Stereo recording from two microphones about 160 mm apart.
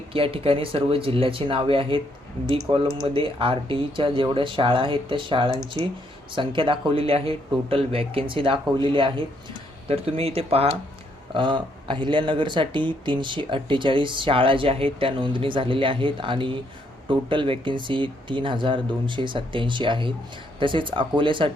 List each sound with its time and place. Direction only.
0.1 s speech: 35° right (ahead or behind)